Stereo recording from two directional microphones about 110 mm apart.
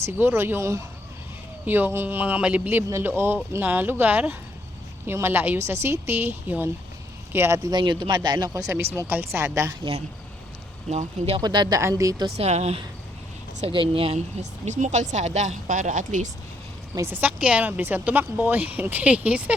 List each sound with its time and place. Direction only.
0.0 s a woman's voice: 20° right (ahead or behind)
7.6 s speech: 45° right (ahead or behind)
8.5 s a woman's voice: 25° right (ahead or behind)
10.8 s speech: 75° right (ahead or behind)
11.3 s speech: 40° right (ahead or behind)
11.8 s a woman's voice: 25° right (ahead or behind)
12.4 s speech: 75° right (ahead or behind)
13.7 s speech: 55° right (ahead or behind); by 15.5 s 90° right
17.1 s a man's voice: 15° right (ahead or behind)